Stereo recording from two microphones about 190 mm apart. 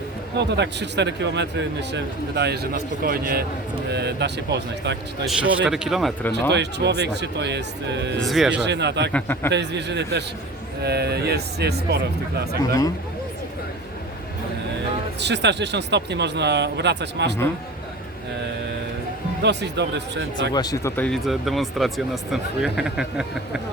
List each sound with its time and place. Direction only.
0.3 s speech: 65° right (ahead or behind)
5.2 s speech: 5° right (ahead or behind)
6.5 s speech: 65° right (ahead or behind)
8.3 s speech: 5° right (ahead or behind)
8.6 s speech: 65° right (ahead or behind)
9.1 s a man's voice: 10° left (ahead or behind)
9.5 s speech: 65° right (ahead or behind)
15.2 s speech: 65° right (ahead or behind)
19.4 s speech: 65° right (ahead or behind)
20.5 s speech: 20° left (ahead or behind); by 23.2 s 5° right (ahead or behind)